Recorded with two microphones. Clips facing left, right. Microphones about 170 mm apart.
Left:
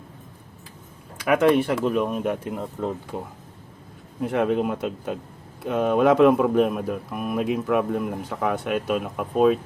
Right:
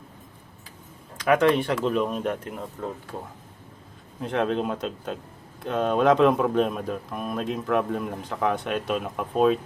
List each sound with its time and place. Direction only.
1.2 s speech: 5° left (ahead or behind)
2.5 s speech: 20° left (ahead or behind)
4.2 s speech: 10° left (ahead or behind)